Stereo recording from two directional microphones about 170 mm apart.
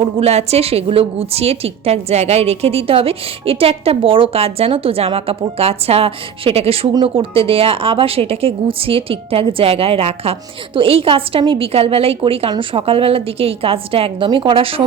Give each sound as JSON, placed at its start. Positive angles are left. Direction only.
{"t": 0.2, "sound": "a woman's voice", "side_deg": -40}